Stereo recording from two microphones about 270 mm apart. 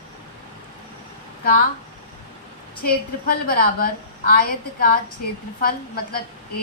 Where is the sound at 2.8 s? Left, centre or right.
Left.